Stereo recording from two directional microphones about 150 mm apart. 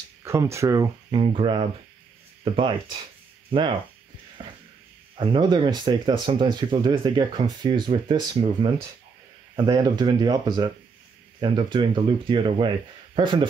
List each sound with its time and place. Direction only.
0.2 s speech: 20° right (ahead or behind)
1.1 s speech: 35° right (ahead or behind)
4.4 s music: 30° right (ahead or behind)
5.1 s speech: 35° right (ahead or behind)